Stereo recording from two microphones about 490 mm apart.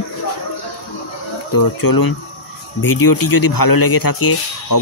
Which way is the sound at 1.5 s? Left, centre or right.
Left.